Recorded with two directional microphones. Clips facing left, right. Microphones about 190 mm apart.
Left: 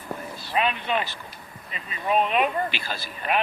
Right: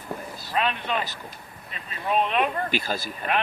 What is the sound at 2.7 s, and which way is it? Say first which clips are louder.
Speech: right 6 dB; 45° right (ahead or behind).